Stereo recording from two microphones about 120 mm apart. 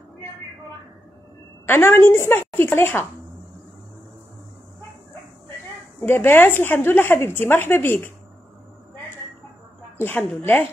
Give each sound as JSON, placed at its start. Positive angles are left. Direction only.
{"t": 1.7, "sound": "a woman's voice", "side_deg": 20}
{"t": 5.9, "sound": "speech", "side_deg": 20}
{"t": 9.9, "sound": "a woman's voice", "side_deg": 15}